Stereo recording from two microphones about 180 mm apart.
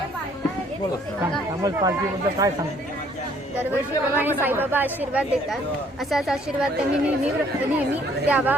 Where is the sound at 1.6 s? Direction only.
20° right (ahead or behind).